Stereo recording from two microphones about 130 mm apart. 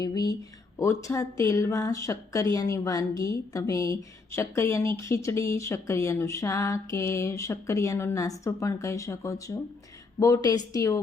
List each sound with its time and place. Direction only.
0.0 s speech: 30° left (ahead or behind)